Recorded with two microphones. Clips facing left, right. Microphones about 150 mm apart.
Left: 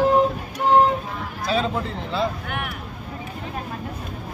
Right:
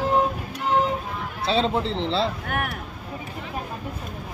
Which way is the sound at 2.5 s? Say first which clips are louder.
Right 2 dB; 45° right (ahead or behind).